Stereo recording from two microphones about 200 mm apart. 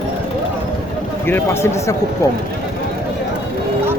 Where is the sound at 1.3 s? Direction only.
15° left (ahead or behind).